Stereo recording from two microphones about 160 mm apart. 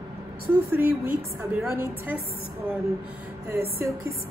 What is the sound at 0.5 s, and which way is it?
A woman's voice, 15° right (ahead or behind).